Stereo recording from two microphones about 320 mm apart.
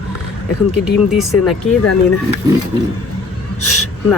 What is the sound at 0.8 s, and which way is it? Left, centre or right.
Speech, centre.